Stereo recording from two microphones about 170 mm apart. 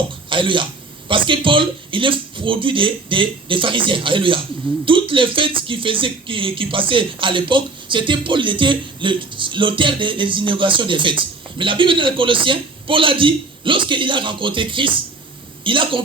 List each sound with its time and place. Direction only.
0.3 s speech: 30° right (ahead or behind)